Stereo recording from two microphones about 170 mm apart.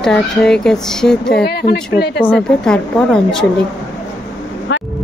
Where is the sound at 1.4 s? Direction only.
70° left (ahead or behind).